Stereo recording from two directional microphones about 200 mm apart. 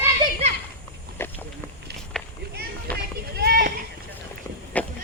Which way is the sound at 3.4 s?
50° right (ahead or behind).